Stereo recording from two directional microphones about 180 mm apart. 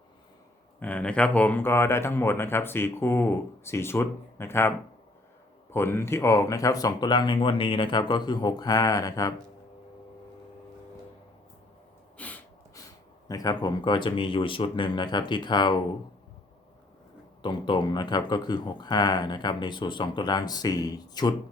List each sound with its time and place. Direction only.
0.8 s speech: 10° left (ahead or behind)
5.7 s speech: 15° left (ahead or behind)
12.1 s sneeze: 10° left (ahead or behind)
13.2 s speech: 20° left (ahead or behind)
17.4 s speech: 25° left (ahead or behind)